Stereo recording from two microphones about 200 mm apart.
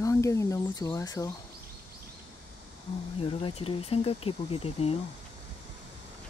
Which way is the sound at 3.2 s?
25° left (ahead or behind).